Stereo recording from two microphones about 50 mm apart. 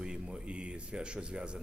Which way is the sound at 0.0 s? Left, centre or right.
Centre.